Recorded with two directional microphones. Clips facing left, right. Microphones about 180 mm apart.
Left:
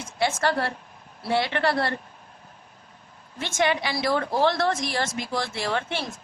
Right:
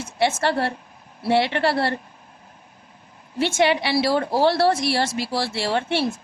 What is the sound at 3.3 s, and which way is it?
A woman's voice, 30° right (ahead or behind).